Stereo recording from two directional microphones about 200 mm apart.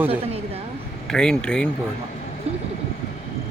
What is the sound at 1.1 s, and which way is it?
Speech, 5° left (ahead or behind).